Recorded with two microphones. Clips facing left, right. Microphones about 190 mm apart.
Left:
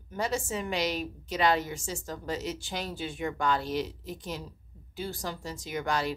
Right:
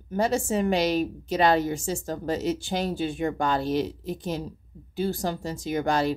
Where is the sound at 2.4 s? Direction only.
30° right (ahead or behind).